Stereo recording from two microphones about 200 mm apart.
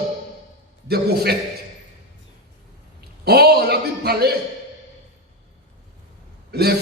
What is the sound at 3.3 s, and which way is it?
A man's voice, 50° right (ahead or behind).